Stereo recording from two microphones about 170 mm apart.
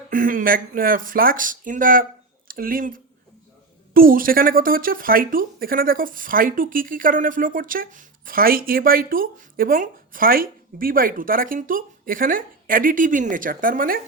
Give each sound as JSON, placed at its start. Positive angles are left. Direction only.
{"t": 0.1, "sound": "a woman's voice", "side_deg": -55}